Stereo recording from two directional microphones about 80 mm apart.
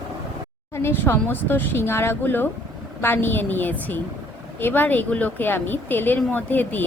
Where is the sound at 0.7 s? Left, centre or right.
Left.